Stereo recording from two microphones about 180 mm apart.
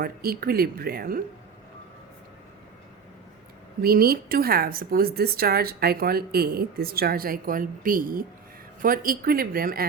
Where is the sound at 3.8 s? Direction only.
55° right (ahead or behind).